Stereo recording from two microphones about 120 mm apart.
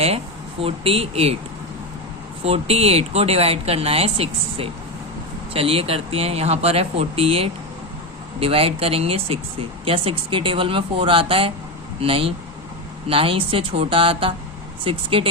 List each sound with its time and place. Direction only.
0.6 s speech: 55° right (ahead or behind)
2.4 s speech: 60° right (ahead or behind)